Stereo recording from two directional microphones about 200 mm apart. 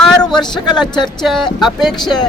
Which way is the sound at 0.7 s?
Centre (ahead or behind).